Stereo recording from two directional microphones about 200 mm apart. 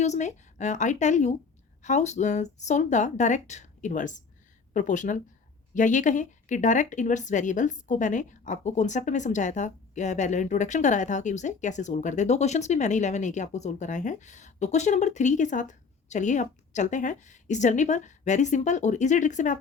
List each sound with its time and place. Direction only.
0.0 s speech: 35° left (ahead or behind)